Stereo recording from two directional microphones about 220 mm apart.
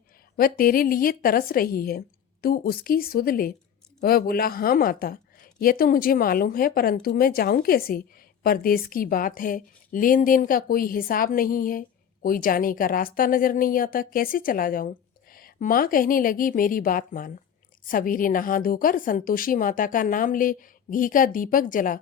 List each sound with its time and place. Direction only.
0.3 s a woman's voice: 40° left (ahead or behind)